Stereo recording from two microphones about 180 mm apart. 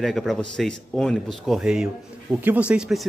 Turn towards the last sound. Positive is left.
turn(degrees=0)  # may be behind; listen again after turning